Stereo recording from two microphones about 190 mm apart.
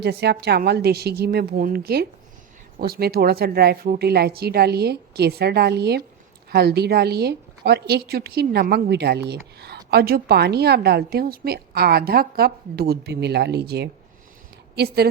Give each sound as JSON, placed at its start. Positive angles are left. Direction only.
{"t": 0.0, "sound": "a woman's voice", "side_deg": -60}